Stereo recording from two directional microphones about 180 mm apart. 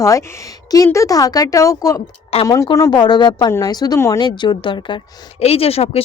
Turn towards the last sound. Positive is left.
turn(degrees=35)  # may be behind; listen again after turning